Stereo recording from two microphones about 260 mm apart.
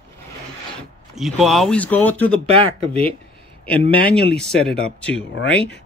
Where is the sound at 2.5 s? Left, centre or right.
Right.